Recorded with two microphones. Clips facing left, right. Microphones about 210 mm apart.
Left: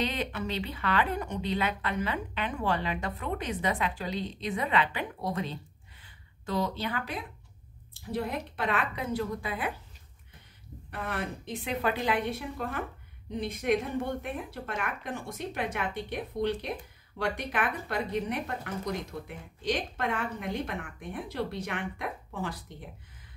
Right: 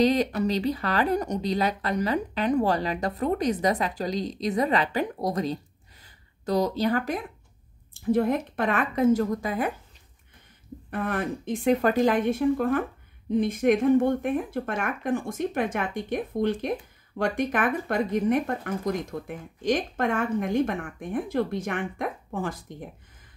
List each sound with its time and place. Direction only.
0.0 s a woman's voice: 40° right (ahead or behind)
10.9 s speech: 50° right (ahead or behind)